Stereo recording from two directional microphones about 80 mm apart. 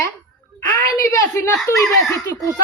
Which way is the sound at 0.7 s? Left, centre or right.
Left.